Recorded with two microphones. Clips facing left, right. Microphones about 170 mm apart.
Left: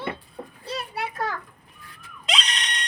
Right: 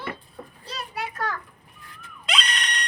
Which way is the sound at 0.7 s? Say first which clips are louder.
Left 2 dB; 30° left (ahead or behind).